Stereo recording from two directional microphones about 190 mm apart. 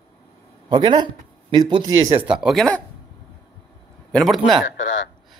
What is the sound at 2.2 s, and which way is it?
Speech, 5° right (ahead or behind).